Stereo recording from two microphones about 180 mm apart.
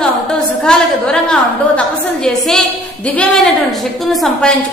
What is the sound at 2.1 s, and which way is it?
A woman's voice, centre (ahead or behind).